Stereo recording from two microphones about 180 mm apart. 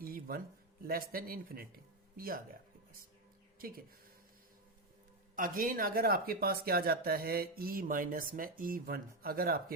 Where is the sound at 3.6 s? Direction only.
55° right (ahead or behind).